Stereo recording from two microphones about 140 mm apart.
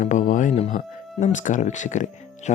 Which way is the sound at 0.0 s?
65° left (ahead or behind).